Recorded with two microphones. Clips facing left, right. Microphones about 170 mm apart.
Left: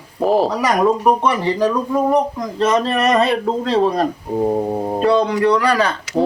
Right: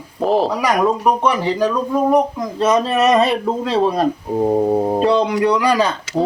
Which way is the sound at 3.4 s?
5° right (ahead or behind).